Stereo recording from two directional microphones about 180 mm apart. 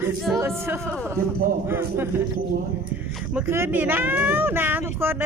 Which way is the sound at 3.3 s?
15° right (ahead or behind).